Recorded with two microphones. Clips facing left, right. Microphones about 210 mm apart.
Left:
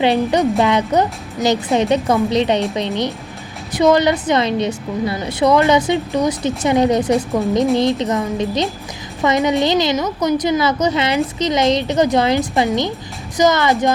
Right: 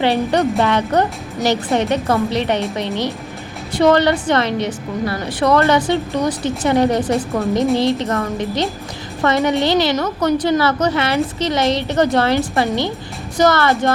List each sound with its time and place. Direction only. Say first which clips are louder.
0.0 s a woman's voice: left 1 dB; 15° left (ahead or behind)
3.8 s a woman's voice: even; 10° left (ahead or behind)